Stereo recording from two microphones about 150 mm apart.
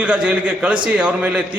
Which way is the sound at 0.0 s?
10° right (ahead or behind).